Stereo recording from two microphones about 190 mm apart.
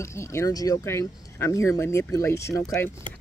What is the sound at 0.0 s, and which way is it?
Speech, 15° left (ahead or behind).